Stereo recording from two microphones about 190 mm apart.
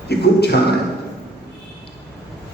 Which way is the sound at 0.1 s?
60° left (ahead or behind).